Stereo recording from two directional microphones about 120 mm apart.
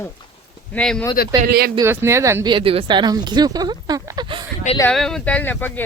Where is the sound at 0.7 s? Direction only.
5° left (ahead or behind).